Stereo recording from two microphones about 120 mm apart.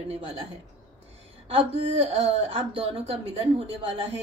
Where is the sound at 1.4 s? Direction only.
55° right (ahead or behind).